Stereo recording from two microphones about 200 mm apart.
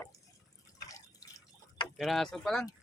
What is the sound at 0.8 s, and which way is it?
Drip, 15° left (ahead or behind).